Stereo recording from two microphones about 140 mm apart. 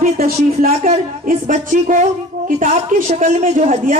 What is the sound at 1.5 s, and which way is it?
A man's voice, 60° right (ahead or behind).